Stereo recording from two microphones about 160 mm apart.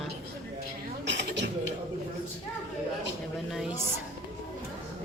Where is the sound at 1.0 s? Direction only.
90° right.